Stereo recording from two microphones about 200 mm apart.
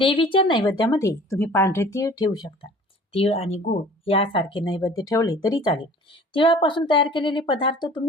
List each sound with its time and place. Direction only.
0.0 s speech: 25° left (ahead or behind)